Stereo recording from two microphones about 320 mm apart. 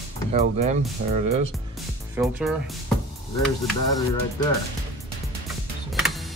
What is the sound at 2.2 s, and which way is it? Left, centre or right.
Speech, centre.